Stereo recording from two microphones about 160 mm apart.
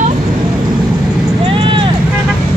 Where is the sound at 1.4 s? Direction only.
35° right (ahead or behind).